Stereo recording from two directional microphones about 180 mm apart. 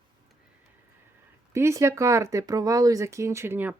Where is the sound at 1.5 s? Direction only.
15° right (ahead or behind).